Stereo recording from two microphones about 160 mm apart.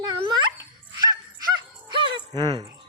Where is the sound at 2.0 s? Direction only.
30° right (ahead or behind).